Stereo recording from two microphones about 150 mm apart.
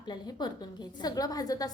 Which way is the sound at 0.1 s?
30° left (ahead or behind).